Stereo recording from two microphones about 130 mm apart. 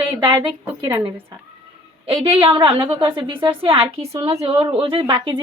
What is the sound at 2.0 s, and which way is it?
A woman's voice, 45° right (ahead or behind).